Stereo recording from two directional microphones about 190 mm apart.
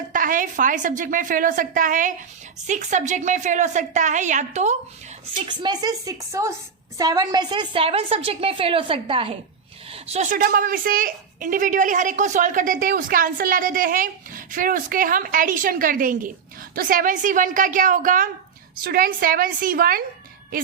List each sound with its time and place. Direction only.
0.1 s a woman's voice: 45° right (ahead or behind)
5.5 s a woman's voice: 20° right (ahead or behind); by 20.0 s 50° right (ahead or behind)